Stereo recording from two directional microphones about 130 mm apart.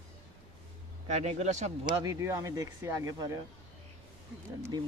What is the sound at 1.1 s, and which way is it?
Speech, 60° right (ahead or behind).